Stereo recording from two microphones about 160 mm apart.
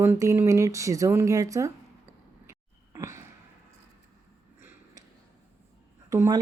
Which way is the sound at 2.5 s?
20° right (ahead or behind).